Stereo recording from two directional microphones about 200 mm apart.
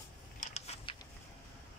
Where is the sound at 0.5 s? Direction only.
30° left (ahead or behind).